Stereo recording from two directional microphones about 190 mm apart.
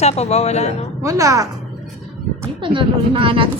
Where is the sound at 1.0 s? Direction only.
15° right (ahead or behind).